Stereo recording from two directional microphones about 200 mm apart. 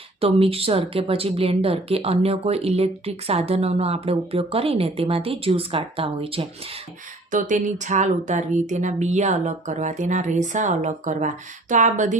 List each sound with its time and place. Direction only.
0.2 s a woman's voice: 30° right (ahead or behind)
7.3 s speech: 40° right (ahead or behind)